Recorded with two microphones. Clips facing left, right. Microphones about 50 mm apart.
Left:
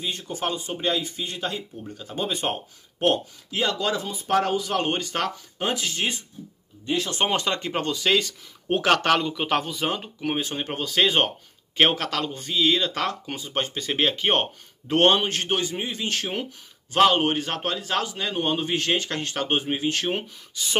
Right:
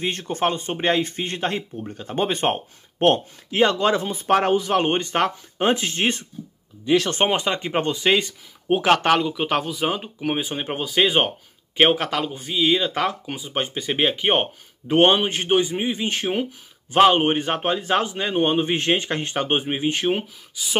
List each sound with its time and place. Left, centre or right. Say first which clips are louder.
0.0 s speech: right 6 dB; right
7.2 s a man's voice: right 2 dB; centre
8.6 s a man's voice: right 3 dB; centre
20.1 s speech: right 5 dB; centre